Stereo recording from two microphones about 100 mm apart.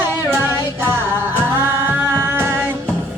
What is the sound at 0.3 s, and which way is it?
Music, 25° right (ahead or behind).